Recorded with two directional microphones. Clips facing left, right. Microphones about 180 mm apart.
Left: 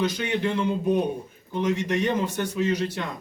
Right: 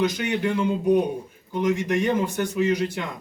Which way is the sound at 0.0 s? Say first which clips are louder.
Right 2 dB; 15° right (ahead or behind).